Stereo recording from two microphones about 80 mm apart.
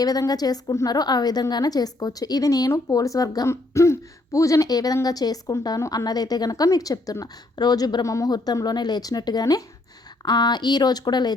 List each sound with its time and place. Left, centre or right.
0.0 s a woman's voice: left
3.5 s a woman's voice: left
7.5 s a woman's voice: left
8.0 s speech: left
8.6 s a woman's voice: left
10.2 s a woman's voice: left